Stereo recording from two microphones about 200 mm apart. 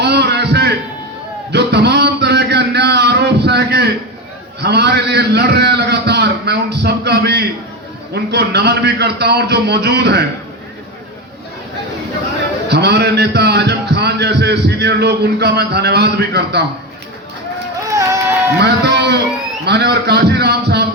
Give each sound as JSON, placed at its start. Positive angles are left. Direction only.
{"t": 0.0, "sound": "heart sounds", "side_deg": -55}
{"t": 1.5, "sound": "a sound", "side_deg": -55}
{"t": 4.6, "sound": "a man's voice", "side_deg": -55}
{"t": 12.6, "sound": "a man's voice", "side_deg": -55}
{"t": 17.8, "sound": "a sound", "side_deg": -15}
{"t": 18.6, "sound": "a man's voice", "side_deg": -55}